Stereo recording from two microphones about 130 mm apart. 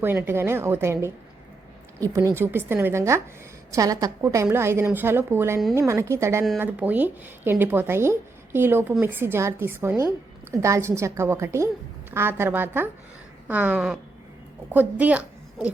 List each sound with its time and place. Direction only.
0.0 s a woman's voice: 15° right (ahead or behind)